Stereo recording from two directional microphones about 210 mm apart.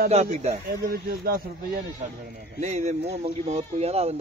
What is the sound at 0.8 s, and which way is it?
Speech, 50° right (ahead or behind).